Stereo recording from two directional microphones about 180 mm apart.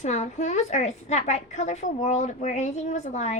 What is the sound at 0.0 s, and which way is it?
A woman's voice, 40° left (ahead or behind).